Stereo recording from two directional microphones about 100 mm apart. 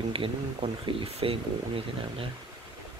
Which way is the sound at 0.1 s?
65° right (ahead or behind).